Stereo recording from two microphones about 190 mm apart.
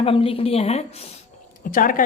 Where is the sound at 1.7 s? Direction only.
45° left (ahead or behind).